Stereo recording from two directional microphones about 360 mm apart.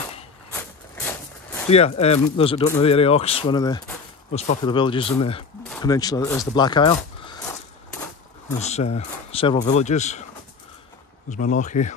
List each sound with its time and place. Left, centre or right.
1.7 s speech: centre
8.5 s speech: centre
11.2 s speech: centre